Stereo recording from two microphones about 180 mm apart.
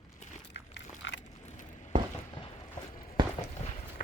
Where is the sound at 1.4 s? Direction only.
40° left (ahead or behind).